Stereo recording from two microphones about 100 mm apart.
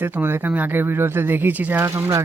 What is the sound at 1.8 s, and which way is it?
Speech, 30° right (ahead or behind).